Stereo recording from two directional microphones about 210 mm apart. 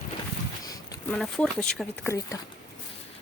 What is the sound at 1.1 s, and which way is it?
Speech, centre (ahead or behind).